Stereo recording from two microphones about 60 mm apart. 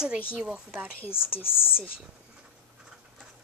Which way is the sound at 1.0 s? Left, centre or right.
Left.